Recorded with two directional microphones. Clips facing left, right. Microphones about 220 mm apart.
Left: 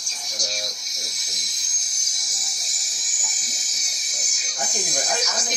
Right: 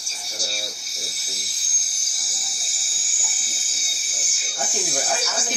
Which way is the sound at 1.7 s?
40° left (ahead or behind).